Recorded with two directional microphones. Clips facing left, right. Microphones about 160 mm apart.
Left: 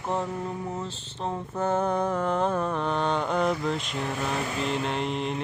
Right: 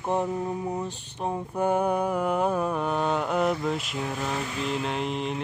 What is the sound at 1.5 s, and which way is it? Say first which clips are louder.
Mantra: right 1 dB; 15° right (ahead or behind).